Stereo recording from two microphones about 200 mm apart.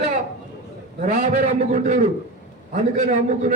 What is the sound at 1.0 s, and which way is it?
A man's voice, 40° right (ahead or behind).